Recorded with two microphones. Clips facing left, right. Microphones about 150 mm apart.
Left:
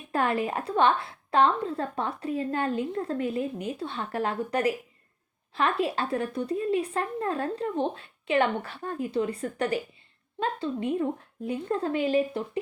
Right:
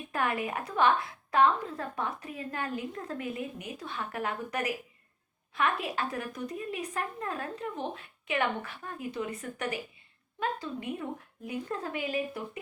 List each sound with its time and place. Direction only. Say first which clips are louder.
0.1 s a woman's voice: left 5 dB; 30° left (ahead or behind)